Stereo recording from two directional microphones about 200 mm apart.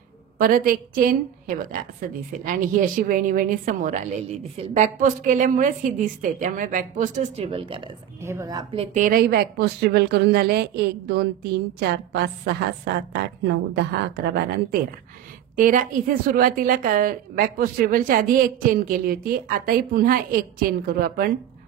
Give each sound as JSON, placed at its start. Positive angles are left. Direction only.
{"t": 0.4, "sound": "a woman's voice", "side_deg": -45}
{"t": 8.2, "sound": "speech", "side_deg": -15}
{"t": 8.9, "sound": "a woman's voice", "side_deg": -45}